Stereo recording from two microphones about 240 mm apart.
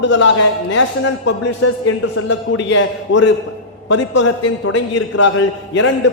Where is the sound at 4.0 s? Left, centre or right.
Left.